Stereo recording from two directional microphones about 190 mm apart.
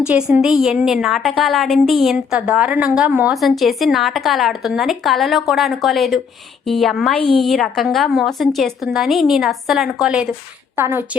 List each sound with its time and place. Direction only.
0.1 s a woman's voice: 5° right (ahead or behind)